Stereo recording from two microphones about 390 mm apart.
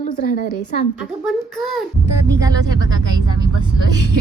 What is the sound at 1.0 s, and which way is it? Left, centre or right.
A woman's voice, centre.